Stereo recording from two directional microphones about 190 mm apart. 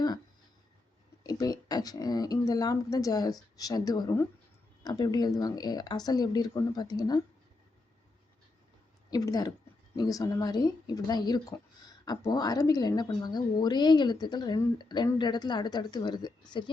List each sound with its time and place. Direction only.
1.2 s speech: 20° left (ahead or behind)
9.0 s speech: 20° left (ahead or behind)